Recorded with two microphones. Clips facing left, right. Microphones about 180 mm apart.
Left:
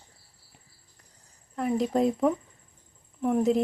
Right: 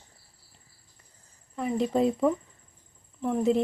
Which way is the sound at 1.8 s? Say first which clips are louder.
Right 1 dB; centre (ahead or behind).